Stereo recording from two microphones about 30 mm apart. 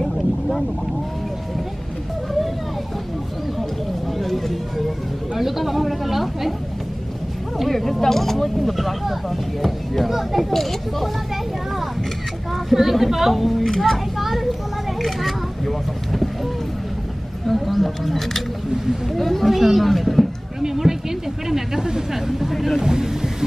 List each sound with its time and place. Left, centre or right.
4.2 s a sound: centre
5.4 s a child's voice: centre
7.7 s a child's voice: centre
12.6 s a child's voice: centre
17.5 s a child's voice: centre
19.5 s a child's voice: centre
20.6 s speech: centre
22.5 s a child's voice: centre
22.8 s speech: centre